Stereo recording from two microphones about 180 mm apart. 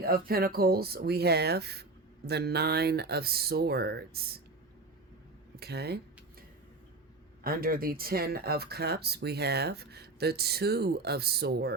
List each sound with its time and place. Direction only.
0.0 s speech: 55° right (ahead or behind)
5.5 s speech: 65° right (ahead or behind)
7.4 s speech: 55° right (ahead or behind)